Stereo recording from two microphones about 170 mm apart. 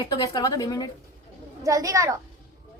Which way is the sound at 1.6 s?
20° right (ahead or behind).